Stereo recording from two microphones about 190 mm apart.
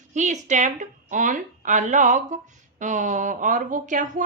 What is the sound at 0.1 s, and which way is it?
A woman's voice, 40° right (ahead or behind).